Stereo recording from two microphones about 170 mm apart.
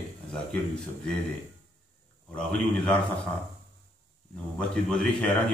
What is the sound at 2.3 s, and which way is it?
Speech, 5° left (ahead or behind).